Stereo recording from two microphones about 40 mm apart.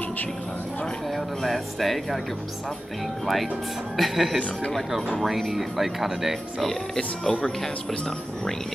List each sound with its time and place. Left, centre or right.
1.1 s speech: centre
3.9 s speech: centre
7.0 s speech: left